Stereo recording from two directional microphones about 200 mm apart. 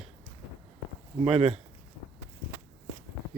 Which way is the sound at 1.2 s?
30° right (ahead or behind).